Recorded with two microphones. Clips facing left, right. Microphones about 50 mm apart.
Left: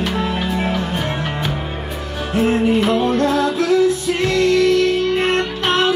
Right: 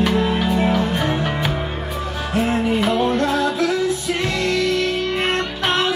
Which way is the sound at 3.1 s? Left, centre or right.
Centre.